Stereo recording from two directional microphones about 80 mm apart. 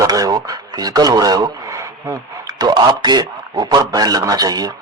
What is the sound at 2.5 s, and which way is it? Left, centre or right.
A man's voice, right.